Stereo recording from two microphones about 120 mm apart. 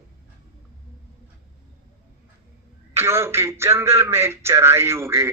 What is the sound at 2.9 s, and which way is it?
Speech, 20° right (ahead or behind).